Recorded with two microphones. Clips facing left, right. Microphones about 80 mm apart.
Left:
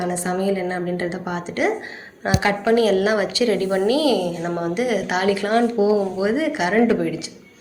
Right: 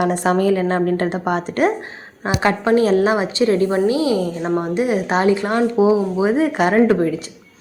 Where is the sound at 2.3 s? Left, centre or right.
Right.